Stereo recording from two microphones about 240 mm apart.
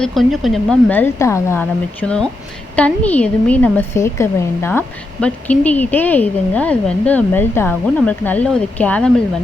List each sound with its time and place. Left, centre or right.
0.0 s a woman's voice: centre